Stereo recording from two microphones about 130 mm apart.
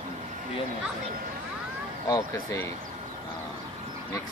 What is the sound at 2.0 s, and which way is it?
Speech, 25° left (ahead or behind).